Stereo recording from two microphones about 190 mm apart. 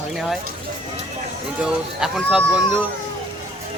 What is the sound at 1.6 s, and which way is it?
Speech, 5° right (ahead or behind).